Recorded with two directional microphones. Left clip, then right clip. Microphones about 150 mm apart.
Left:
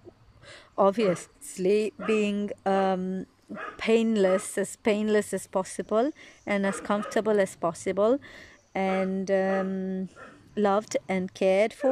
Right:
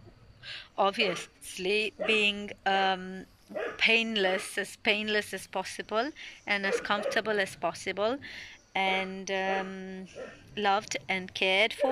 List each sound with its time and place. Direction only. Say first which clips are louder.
0.5 s speech: left 4 dB; 45° left (ahead or behind)
2.0 s speech: right 4 dB; 25° left (ahead or behind)
2.6 s a woman's voice: left 1 dB; 50° left (ahead or behind)